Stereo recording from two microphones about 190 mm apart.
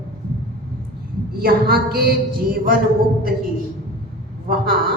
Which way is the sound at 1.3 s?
50° right (ahead or behind).